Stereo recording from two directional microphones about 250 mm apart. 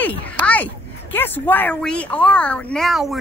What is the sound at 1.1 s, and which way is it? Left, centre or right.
Speech, centre.